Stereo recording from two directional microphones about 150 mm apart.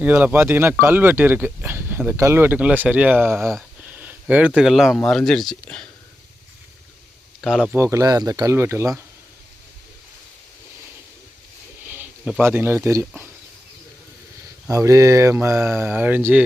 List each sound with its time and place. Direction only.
0.0 s speech: 10° right (ahead or behind)
3.8 s a sound: 10° right (ahead or behind)
4.9 s speech: centre (ahead or behind)
7.4 s speech: centre (ahead or behind)
7.7 s speech: 15° right (ahead or behind)
11.9 s speech: 10° right (ahead or behind)
14.7 s speech: 20° right (ahead or behind)